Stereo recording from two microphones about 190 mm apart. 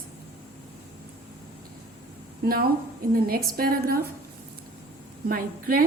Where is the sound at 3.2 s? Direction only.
55° right (ahead or behind).